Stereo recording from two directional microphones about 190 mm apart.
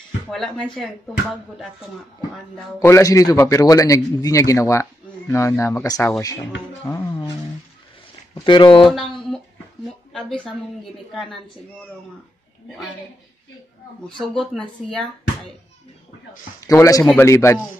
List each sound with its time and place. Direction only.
0.3 s speech: centre (ahead or behind)
2.8 s a man's voice: 15° left (ahead or behind)
6.9 s music: 15° left (ahead or behind)
8.5 s speech: 25° left (ahead or behind)
8.8 s speech: centre (ahead or behind)
12.6 s speech: centre (ahead or behind)
14.0 s speech: 5° left (ahead or behind)
16.6 s a man's voice: 15° left (ahead or behind)